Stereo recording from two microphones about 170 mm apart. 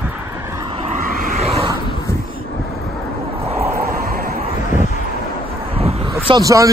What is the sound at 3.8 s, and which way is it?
Vehicle, 60° right (ahead or behind).